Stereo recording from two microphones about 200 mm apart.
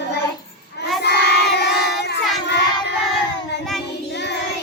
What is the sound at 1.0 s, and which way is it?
Child singing, 55° left (ahead or behind).